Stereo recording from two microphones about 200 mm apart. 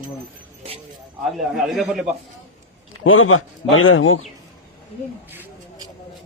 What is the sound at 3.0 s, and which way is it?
A man's voice, 85° left.